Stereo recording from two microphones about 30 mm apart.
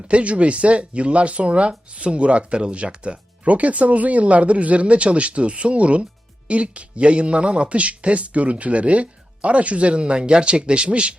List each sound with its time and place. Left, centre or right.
0.1 s speech: right